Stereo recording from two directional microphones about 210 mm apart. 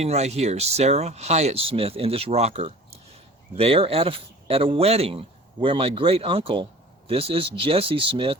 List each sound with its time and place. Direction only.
0.0 s speech: 30° right (ahead or behind)